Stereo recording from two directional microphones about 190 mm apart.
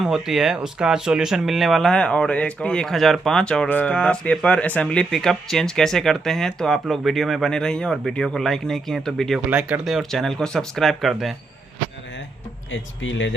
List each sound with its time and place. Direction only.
0.0 s speech: centre (ahead or behind)
12.7 s speech: 85° left